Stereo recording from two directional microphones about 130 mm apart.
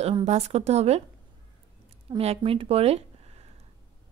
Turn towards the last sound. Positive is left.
turn(degrees=-55)  # may be behind; listen again after turning